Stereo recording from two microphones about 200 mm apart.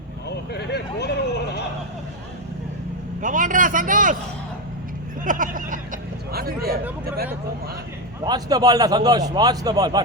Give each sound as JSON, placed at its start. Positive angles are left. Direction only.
{"t": 0.3, "sound": "a sound", "side_deg": 55}
{"t": 3.2, "sound": "a man's voice", "side_deg": -40}
{"t": 5.2, "sound": "vehicle", "side_deg": -40}
{"t": 8.2, "sound": "a man's voice", "side_deg": -20}